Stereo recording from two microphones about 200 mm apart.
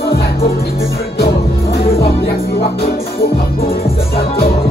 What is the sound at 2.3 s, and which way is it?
Music, 50° left (ahead or behind).